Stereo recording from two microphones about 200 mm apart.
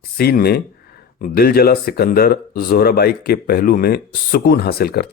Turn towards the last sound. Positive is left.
turn(degrees=50)  # may be behind; listen again after turning